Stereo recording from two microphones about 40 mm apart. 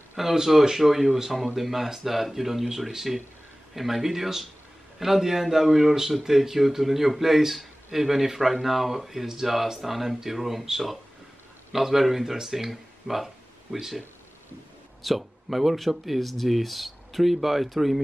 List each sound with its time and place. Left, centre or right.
0.1 s a man's voice: centre
15.0 s speech: centre